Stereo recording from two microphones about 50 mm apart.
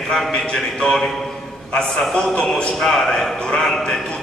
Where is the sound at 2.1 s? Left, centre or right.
Centre.